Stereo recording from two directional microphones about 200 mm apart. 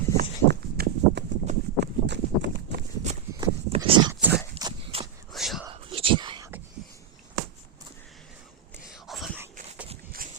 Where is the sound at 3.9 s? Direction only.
25° right (ahead or behind).